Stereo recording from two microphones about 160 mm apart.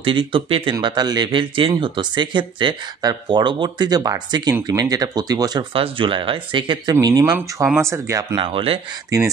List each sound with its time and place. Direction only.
0.0 s speech: 30° right (ahead or behind)
7.3 s speech: 15° right (ahead or behind)
8.4 s speech: 35° right (ahead or behind)
9.1 s speech: 20° right (ahead or behind)